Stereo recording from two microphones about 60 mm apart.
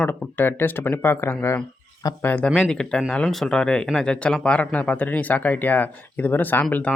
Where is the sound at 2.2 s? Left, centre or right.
Left.